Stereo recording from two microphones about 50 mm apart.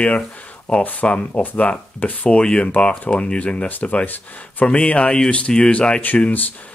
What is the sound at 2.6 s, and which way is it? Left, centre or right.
Speech, left.